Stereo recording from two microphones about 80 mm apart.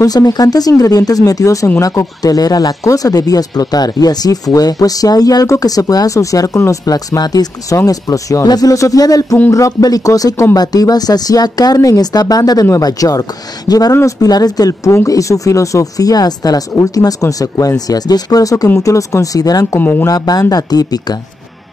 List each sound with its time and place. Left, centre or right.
0.0 s speech: left
19.8 s speech: left
20.1 s speech: left